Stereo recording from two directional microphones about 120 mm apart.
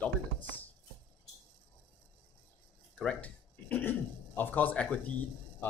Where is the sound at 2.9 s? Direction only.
10° left (ahead or behind).